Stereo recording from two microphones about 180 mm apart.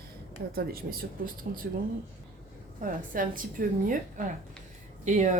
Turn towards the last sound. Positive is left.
turn(degrees=-40)  # may be behind; listen again after turning